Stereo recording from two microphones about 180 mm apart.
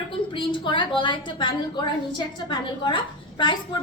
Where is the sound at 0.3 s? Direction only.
25° left (ahead or behind).